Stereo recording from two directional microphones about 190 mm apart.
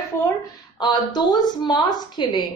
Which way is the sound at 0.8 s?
25° left (ahead or behind).